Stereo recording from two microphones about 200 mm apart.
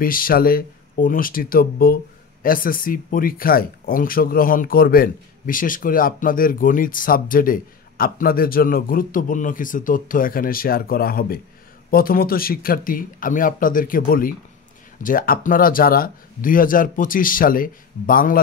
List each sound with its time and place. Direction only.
0.0 s speech: 45° left (ahead or behind)